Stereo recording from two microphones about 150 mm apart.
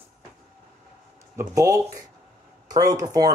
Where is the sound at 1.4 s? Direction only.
20° right (ahead or behind).